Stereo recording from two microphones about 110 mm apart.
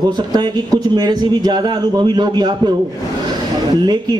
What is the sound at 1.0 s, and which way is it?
A man's voice, 40° right (ahead or behind).